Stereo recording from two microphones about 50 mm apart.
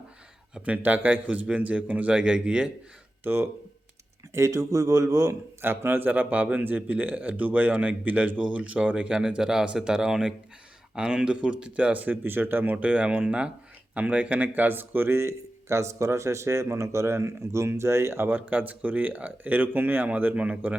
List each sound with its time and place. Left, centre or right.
0.6 s a man's voice: right
4.4 s speech: right
5.6 s a man's voice: right
9.4 s speech: centre; by 12.1 s right
12.1 s speech: right
12.7 s speech: right
18.3 s a man's voice: right
20.3 s speech: right